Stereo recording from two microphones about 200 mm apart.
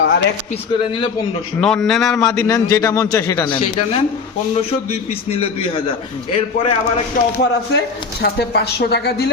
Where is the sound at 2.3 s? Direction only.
15° left (ahead or behind).